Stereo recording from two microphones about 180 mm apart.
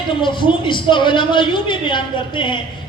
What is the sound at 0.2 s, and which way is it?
A man's voice, 25° left (ahead or behind).